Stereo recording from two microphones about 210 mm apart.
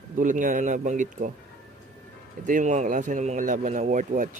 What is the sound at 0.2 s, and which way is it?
A man's voice, 40° right (ahead or behind).